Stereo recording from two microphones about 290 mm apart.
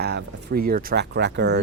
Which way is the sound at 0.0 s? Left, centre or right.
Right.